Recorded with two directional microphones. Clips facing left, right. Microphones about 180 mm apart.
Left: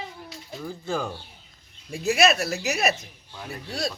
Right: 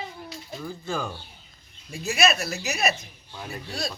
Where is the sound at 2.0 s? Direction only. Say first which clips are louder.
Left 3 dB; 90° left.